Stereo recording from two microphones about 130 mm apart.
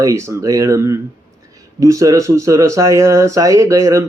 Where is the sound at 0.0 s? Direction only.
25° right (ahead or behind).